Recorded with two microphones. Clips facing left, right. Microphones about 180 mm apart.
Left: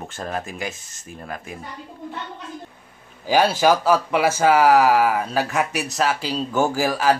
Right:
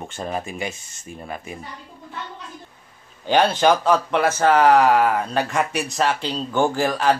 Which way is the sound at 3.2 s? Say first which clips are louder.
Even; 5° left (ahead or behind).